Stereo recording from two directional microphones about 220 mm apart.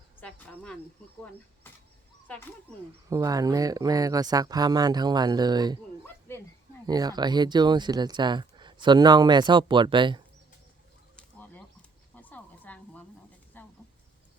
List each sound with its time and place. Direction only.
0.2 s a sound: 5° left (ahead or behind)
2.2 s speech: 5° left (ahead or behind)
3.1 s speech: 15° right (ahead or behind)
6.8 s speech: 15° right (ahead or behind)
11.2 s bird: 5° left (ahead or behind)
12.1 s a sound: 5° left (ahead or behind)